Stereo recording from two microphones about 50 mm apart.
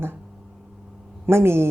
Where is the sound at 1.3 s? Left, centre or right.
Right.